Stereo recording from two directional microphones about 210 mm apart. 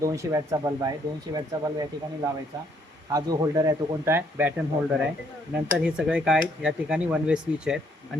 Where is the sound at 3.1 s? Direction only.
20° right (ahead or behind).